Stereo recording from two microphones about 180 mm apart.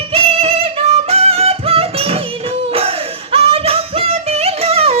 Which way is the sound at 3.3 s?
30° right (ahead or behind).